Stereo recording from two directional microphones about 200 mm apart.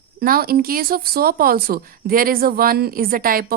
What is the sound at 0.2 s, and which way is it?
Speech, 50° right (ahead or behind).